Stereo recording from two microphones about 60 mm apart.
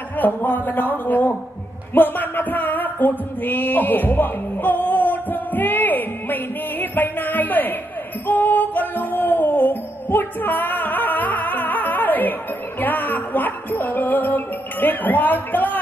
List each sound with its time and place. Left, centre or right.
0.2 s a man's voice: left
2.0 s music: left